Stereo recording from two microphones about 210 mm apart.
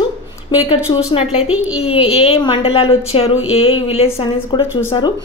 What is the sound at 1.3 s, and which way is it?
Speech, 80° left.